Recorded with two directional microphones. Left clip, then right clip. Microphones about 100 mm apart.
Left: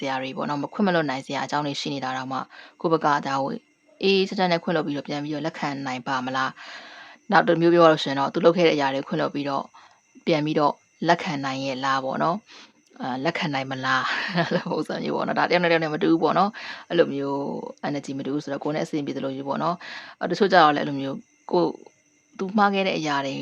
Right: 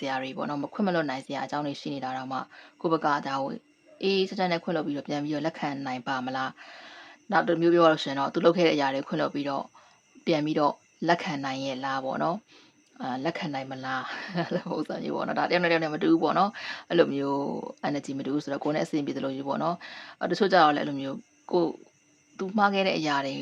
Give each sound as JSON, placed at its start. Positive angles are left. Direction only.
{"t": 0.0, "sound": "speech", "side_deg": 25}
{"t": 5.0, "sound": "speech", "side_deg": 15}
{"t": 7.3, "sound": "speech", "side_deg": 45}